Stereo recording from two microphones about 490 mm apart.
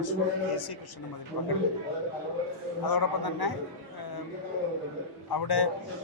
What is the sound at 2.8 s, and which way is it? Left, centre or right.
Speech, left.